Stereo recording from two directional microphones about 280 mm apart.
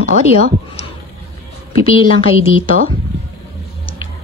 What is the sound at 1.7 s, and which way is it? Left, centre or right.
Speech, centre.